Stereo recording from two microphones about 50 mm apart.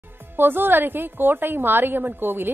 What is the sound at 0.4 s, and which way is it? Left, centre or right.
A woman's voice, right.